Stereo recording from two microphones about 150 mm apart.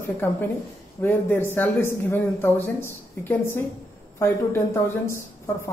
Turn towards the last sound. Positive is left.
turn(degrees=15)  # may be behind; listen again after turning